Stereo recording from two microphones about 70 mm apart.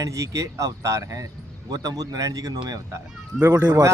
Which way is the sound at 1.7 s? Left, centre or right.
Right.